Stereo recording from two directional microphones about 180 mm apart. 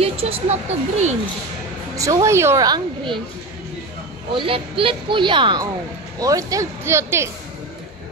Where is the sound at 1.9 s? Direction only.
20° right (ahead or behind).